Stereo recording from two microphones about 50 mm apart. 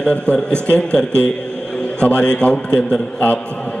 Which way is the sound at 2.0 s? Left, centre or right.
Left.